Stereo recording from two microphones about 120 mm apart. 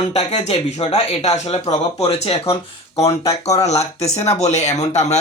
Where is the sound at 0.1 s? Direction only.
55° left (ahead or behind).